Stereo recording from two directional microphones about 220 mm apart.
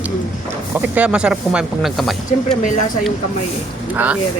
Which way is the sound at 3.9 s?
5° right (ahead or behind).